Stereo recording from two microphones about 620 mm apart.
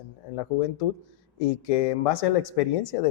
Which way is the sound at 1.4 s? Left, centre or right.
Left.